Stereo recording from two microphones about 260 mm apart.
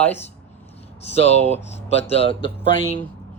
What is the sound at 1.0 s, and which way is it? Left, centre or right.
Speech, left.